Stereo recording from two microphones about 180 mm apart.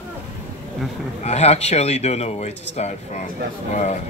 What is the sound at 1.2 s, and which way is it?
Speech, 35° left (ahead or behind).